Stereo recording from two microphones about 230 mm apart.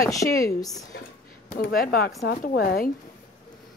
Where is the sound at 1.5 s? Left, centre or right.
Left.